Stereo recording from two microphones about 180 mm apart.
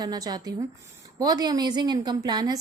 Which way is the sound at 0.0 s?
20° right (ahead or behind).